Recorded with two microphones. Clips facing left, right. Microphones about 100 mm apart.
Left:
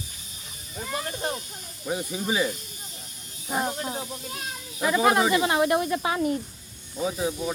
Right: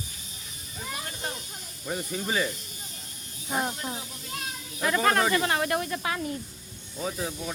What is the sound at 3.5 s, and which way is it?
Speech, 5° left (ahead or behind).